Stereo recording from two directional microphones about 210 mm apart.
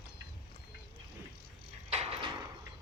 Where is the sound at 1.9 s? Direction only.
30° right (ahead or behind).